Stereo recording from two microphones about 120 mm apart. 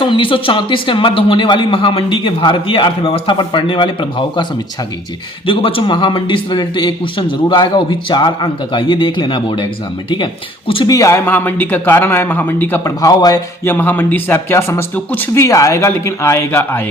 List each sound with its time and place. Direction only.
0.0 s speech: 45° left (ahead or behind)
5.5 s a man's voice: 45° left (ahead or behind)
10.8 s a man's voice: 30° left (ahead or behind)
13.7 s a man's voice: 15° left (ahead or behind)
15.4 s speech: 25° left (ahead or behind)